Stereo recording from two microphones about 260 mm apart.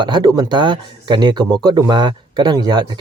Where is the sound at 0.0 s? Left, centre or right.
Centre.